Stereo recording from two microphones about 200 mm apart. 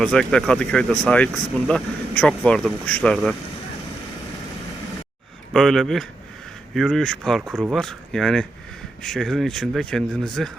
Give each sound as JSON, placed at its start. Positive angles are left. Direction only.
{"t": 0.0, "sound": "speech", "side_deg": 5}
{"t": 5.5, "sound": "speech", "side_deg": 0}